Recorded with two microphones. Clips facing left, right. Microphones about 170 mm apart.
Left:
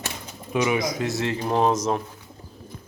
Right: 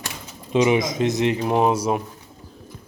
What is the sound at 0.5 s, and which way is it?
Speech, 25° right (ahead or behind).